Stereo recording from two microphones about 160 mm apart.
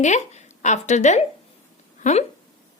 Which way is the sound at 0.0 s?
45° left (ahead or behind).